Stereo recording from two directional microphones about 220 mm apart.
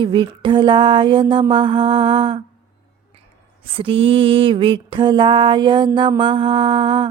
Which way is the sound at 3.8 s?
25° right (ahead or behind).